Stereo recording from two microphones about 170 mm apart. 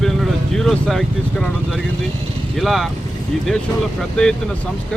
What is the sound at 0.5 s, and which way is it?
Speech, centre (ahead or behind).